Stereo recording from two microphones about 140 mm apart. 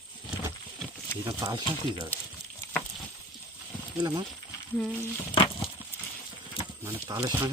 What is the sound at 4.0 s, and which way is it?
Speech, 30° right (ahead or behind).